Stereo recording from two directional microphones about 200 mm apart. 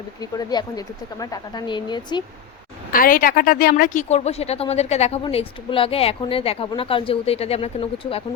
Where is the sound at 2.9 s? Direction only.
45° left (ahead or behind); by 8.2 s 30° left (ahead or behind).